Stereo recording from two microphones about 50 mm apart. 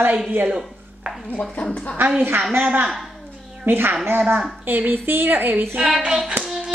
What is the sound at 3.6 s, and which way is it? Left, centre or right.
A woman's voice, right.